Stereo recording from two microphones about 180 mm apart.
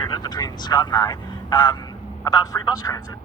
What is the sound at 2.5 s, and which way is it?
Speech, 10° left (ahead or behind).